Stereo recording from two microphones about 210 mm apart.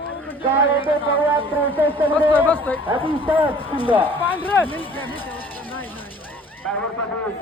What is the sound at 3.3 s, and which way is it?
Speech, 5° right (ahead or behind).